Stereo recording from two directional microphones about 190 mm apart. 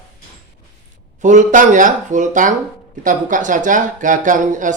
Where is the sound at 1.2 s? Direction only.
40° right (ahead or behind).